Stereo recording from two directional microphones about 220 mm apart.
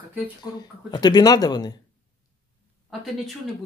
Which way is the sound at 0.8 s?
20° left (ahead or behind).